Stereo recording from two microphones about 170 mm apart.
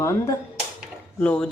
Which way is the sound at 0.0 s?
15° left (ahead or behind).